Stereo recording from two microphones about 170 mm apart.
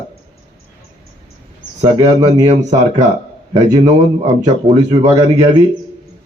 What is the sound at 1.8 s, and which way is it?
Speech, 25° right (ahead or behind).